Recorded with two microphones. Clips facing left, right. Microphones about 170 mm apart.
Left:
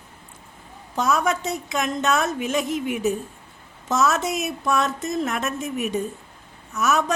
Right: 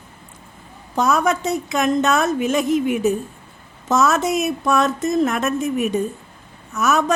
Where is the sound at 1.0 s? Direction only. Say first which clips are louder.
Right 4 dB; 45° right (ahead or behind).